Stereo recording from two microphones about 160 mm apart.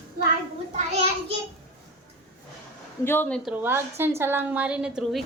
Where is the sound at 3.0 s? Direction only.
10° left (ahead or behind).